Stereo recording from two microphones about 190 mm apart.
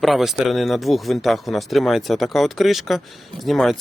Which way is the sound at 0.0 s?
Centre (ahead or behind).